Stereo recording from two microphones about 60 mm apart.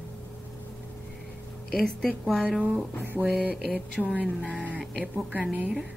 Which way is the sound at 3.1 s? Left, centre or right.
Right.